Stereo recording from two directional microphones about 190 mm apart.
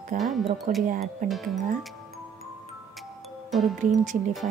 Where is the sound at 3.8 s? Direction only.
40° right (ahead or behind).